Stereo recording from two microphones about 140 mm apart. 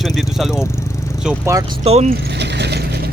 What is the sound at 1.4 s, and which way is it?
Speech, 25° right (ahead or behind).